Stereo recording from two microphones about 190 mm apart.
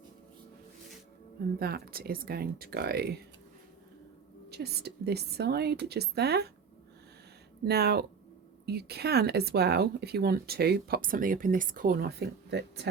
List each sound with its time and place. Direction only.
1.5 s speech: 55° right (ahead or behind)
4.4 s speech: 60° right (ahead or behind)
7.6 s speech: 55° right (ahead or behind)